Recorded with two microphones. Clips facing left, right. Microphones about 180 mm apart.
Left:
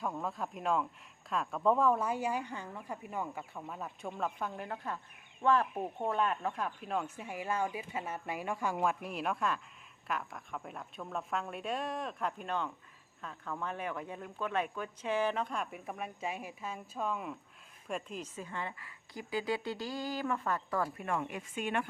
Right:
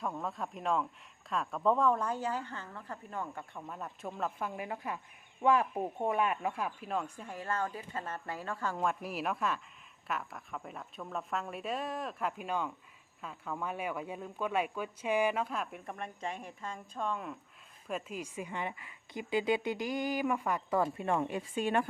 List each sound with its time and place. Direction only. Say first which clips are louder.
0.0 s a woman's voice: even; centre (ahead or behind)
8.9 s a woman's voice: even; centre (ahead or behind); by 21.8 s 35° right (ahead or behind)